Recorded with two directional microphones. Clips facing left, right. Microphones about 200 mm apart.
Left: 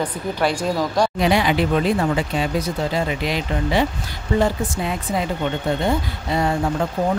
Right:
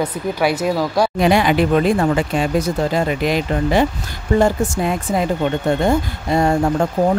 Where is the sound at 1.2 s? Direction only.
50° right (ahead or behind).